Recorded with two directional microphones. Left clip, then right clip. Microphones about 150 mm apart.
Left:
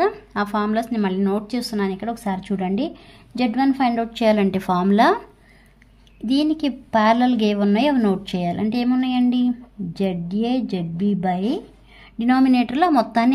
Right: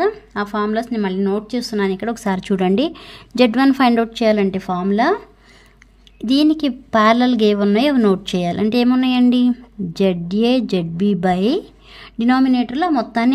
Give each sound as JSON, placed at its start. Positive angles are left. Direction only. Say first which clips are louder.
{"t": 0.0, "sound": "a woman's voice", "louder": "right 1 dB", "side_deg": -5}
{"t": 4.1, "sound": "a woman's voice", "louder": "right 2 dB", "side_deg": -20}
{"t": 4.5, "sound": "speech", "louder": "even", "side_deg": 0}
{"t": 6.2, "sound": "a woman's voice", "louder": "right 5 dB", "side_deg": -30}
{"t": 12.4, "sound": "speech", "louder": "even", "side_deg": 0}